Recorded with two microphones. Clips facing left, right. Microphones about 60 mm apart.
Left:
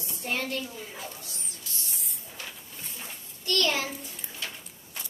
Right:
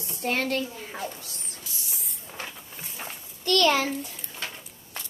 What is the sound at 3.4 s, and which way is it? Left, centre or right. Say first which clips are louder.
Speech: right 6 dB; right.